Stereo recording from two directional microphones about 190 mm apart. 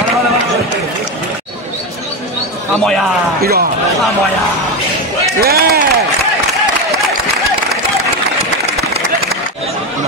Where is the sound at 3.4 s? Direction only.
55° right (ahead or behind).